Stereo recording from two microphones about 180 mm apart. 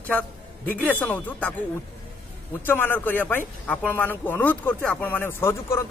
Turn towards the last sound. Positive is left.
turn(degrees=15)  # may be behind; listen again after turning